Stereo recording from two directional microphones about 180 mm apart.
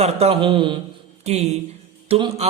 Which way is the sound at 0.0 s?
35° right (ahead or behind).